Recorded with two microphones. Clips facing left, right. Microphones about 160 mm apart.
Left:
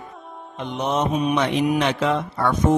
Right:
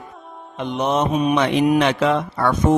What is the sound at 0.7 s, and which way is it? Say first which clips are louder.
Mantra: right 3 dB; 80° right.